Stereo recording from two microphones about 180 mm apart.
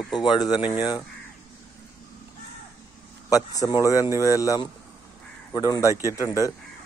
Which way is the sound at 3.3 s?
20° left (ahead or behind).